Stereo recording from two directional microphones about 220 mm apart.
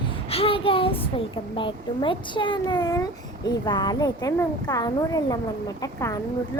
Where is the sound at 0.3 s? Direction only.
25° left (ahead or behind).